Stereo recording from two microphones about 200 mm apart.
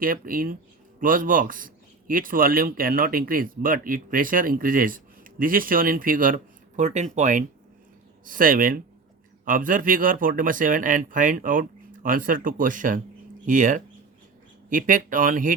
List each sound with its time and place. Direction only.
0.0 s a man's voice: 45° right (ahead or behind)